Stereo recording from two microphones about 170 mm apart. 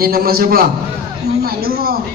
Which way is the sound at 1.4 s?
65° right (ahead or behind).